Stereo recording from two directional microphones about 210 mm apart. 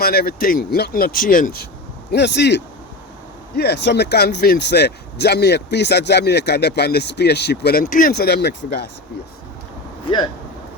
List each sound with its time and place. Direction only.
0.0 s speech: 50° left (ahead or behind)
2.1 s speech: 55° left (ahead or behind)